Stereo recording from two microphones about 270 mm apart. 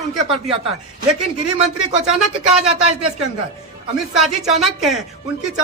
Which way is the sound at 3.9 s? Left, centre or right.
Centre.